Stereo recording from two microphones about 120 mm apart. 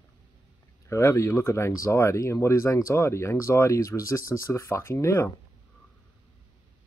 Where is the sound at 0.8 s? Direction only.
25° left (ahead or behind).